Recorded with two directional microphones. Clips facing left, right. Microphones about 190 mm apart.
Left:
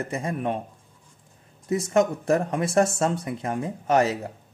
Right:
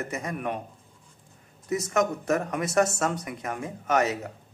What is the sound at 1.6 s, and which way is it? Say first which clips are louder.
Speech: left 4 dB; 30° left (ahead or behind).